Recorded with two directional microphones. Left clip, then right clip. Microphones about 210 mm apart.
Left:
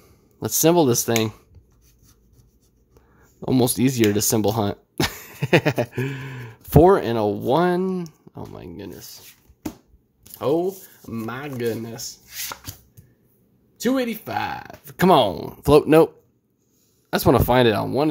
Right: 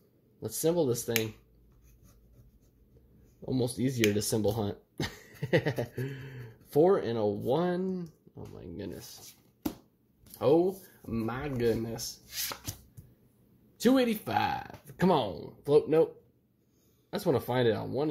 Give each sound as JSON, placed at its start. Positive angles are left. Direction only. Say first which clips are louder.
{"t": 0.4, "sound": "speech", "louder": "left 11 dB", "side_deg": 30}
{"t": 3.3, "sound": "speech", "louder": "left 12 dB", "side_deg": 35}
{"t": 10.3, "sound": "speech", "louder": "left 4 dB", "side_deg": 10}
{"t": 13.7, "sound": "speech", "louder": "left 3 dB", "side_deg": 0}
{"t": 14.9, "sound": "speech", "louder": "left 12 dB", "side_deg": 25}
{"t": 17.1, "sound": "speech", "louder": "left 12 dB", "side_deg": 30}